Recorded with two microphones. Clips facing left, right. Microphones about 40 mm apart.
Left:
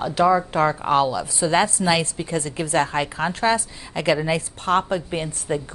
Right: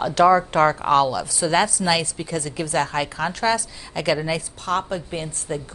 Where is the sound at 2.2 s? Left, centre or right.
Left.